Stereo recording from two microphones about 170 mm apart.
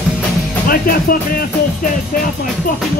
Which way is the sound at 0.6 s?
55° left (ahead or behind).